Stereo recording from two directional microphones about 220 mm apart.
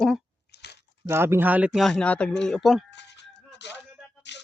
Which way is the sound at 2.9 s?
50° left (ahead or behind).